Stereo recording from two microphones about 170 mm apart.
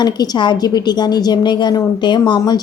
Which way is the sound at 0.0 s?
25° left (ahead or behind).